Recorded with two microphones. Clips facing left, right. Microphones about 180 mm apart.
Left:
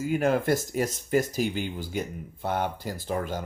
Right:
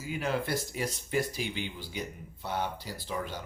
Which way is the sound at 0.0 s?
50° left (ahead or behind).